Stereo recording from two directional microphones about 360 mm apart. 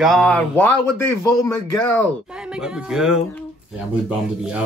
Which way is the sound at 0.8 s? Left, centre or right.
Left.